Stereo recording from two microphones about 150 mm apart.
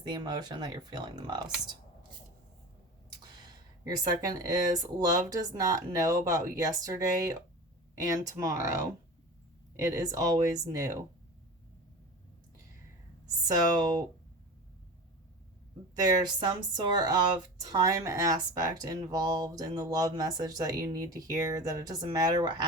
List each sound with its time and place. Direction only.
0.0 s speech: 30° right (ahead or behind)
3.4 s speech: 25° right (ahead or behind)
13.2 s speech: 25° right (ahead or behind)
16.0 s speech: 25° right (ahead or behind)